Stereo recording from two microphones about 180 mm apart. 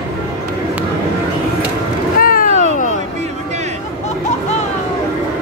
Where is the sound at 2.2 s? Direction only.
50° left (ahead or behind).